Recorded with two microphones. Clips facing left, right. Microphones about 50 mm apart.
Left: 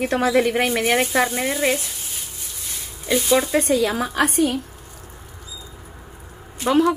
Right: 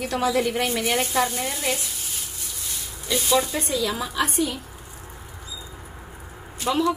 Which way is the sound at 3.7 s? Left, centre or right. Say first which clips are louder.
Left 6 dB; left.